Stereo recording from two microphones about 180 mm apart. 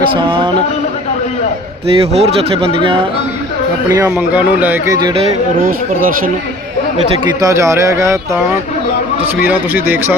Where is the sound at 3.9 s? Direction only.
15° right (ahead or behind).